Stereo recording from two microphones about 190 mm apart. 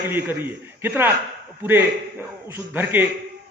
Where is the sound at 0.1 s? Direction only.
10° right (ahead or behind).